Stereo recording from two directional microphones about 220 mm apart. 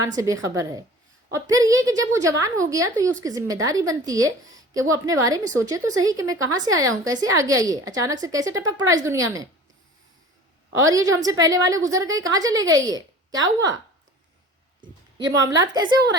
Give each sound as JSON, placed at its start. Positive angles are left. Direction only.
{"t": 0.0, "sound": "a woman's voice", "side_deg": -15}
{"t": 10.8, "sound": "a woman's voice", "side_deg": -15}
{"t": 15.4, "sound": "a woman's voice", "side_deg": -15}